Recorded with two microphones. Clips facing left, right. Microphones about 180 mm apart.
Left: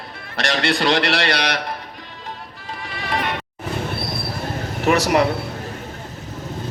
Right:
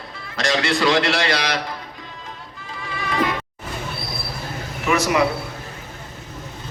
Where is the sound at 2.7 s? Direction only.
65° left (ahead or behind).